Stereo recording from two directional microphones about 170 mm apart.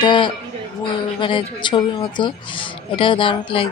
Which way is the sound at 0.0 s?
30° left (ahead or behind).